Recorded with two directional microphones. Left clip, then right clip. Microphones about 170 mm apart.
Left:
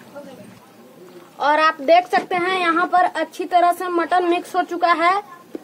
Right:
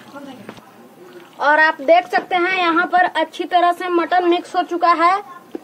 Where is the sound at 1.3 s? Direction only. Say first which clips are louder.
Right 3 dB; 15° left (ahead or behind).